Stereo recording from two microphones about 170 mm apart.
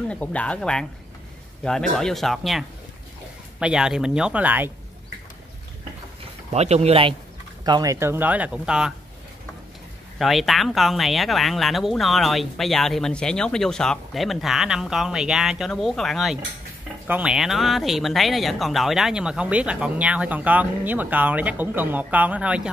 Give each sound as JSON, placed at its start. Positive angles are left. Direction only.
{"t": 0.1, "sound": "speech", "side_deg": 10}
{"t": 6.5, "sound": "speech", "side_deg": -40}
{"t": 7.6, "sound": "speech", "side_deg": -20}
{"t": 10.1, "sound": "speech", "side_deg": 0}